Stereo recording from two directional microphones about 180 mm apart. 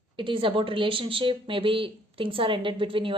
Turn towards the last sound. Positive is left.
turn(degrees=-30)  # may be behind; listen again after turning